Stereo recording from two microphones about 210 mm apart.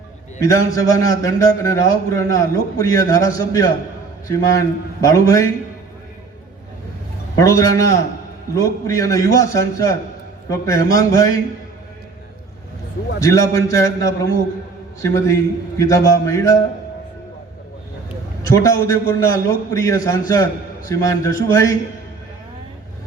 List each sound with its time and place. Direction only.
0.3 s a man's voice: 15° left (ahead or behind)
7.3 s a man's voice: 15° left (ahead or behind)
13.1 s a man's voice: 15° left (ahead or behind)
18.4 s a man's voice: 15° left (ahead or behind)